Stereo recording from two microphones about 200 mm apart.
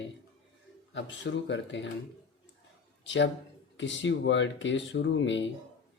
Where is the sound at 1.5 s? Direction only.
65° left (ahead or behind).